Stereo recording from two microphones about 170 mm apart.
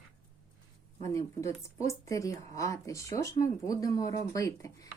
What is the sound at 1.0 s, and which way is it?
Speech, 20° left (ahead or behind).